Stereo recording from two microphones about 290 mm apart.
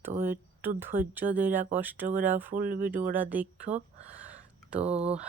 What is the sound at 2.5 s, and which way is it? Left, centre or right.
Speech, right.